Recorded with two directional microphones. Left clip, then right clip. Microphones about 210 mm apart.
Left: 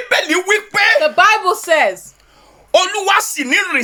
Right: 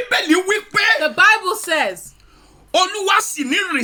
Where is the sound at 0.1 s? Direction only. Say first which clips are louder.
Left 3 dB; 10° left (ahead or behind).